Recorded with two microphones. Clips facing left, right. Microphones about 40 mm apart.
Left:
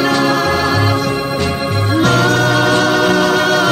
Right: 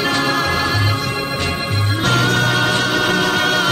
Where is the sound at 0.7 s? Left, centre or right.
Centre.